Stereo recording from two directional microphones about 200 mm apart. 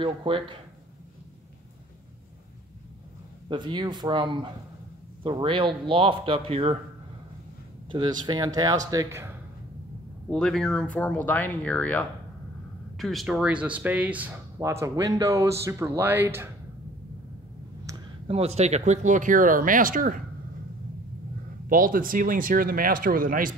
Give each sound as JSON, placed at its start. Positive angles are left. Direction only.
{"t": 0.0, "sound": "a man's voice", "side_deg": -25}
{"t": 3.4, "sound": "a man's voice", "side_deg": -25}
{"t": 7.9, "sound": "a man's voice", "side_deg": -20}
{"t": 10.3, "sound": "speech", "side_deg": 5}
{"t": 18.3, "sound": "speech", "side_deg": -30}
{"t": 21.6, "sound": "speech", "side_deg": -45}